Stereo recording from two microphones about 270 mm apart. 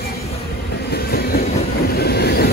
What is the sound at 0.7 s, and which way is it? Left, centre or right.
Train, left.